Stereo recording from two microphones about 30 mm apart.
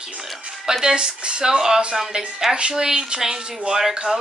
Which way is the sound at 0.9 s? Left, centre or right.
Right.